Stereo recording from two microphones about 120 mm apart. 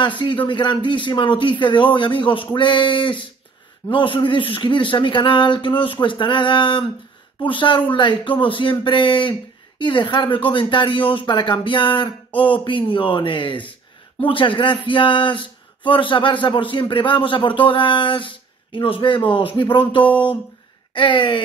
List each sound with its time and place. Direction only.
0.2 s speech: 45° left (ahead or behind)